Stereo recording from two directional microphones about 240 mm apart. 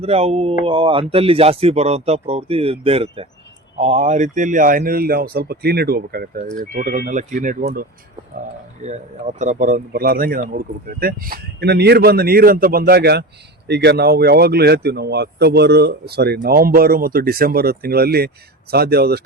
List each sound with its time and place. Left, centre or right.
0.0 s speech: right